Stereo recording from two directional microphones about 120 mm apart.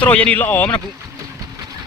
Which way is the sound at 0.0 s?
10° left (ahead or behind).